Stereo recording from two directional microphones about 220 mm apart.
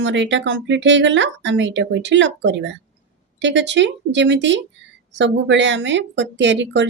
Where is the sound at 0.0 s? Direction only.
55° right (ahead or behind).